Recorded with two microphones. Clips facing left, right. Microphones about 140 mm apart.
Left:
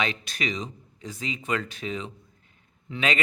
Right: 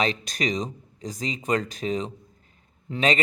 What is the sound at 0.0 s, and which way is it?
Speech, 40° right (ahead or behind).